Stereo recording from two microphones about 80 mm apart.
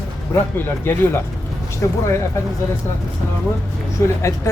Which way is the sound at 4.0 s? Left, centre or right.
Left.